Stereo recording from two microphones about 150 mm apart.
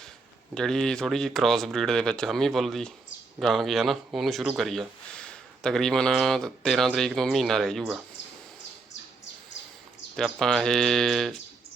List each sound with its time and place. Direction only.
0.5 s speech: 5° left (ahead or behind)
10.2 s speech: centre (ahead or behind)